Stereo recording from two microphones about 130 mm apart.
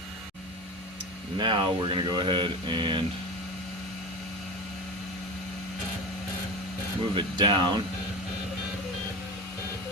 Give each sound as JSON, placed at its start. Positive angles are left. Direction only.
{"t": 1.4, "sound": "speech", "side_deg": -40}
{"t": 7.2, "sound": "speech", "side_deg": -40}